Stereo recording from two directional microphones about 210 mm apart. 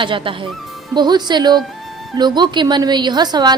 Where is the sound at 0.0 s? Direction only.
25° right (ahead or behind).